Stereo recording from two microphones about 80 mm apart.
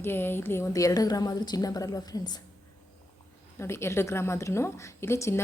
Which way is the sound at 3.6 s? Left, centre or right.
Left.